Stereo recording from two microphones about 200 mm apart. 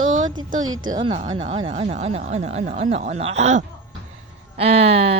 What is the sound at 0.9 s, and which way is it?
A woman's voice, 25° right (ahead or behind).